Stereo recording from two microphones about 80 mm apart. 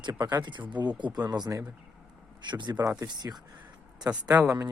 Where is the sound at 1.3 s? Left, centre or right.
Right.